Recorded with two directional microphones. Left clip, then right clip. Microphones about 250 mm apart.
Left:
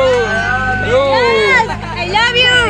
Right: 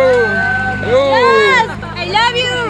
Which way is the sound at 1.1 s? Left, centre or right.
Centre.